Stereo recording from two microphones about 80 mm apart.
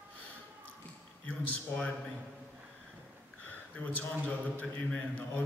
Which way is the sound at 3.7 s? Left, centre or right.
Centre.